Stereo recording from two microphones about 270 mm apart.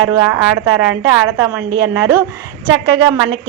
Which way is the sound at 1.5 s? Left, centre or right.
Centre.